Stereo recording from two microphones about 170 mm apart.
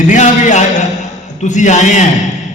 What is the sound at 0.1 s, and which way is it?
Speech, 45° left (ahead or behind).